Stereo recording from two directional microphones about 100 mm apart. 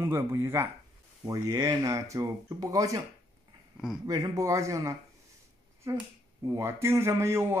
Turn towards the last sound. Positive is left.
turn(degrees=-25)  # may be behind; listen again after turning